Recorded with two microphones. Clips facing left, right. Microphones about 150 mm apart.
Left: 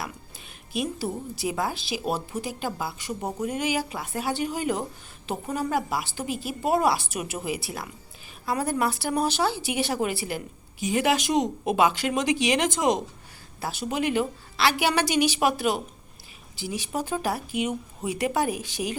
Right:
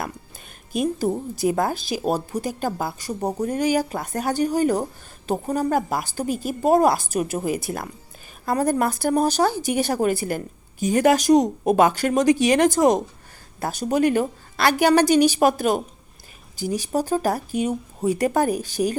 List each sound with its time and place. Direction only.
0.7 s speech: 45° right (ahead or behind)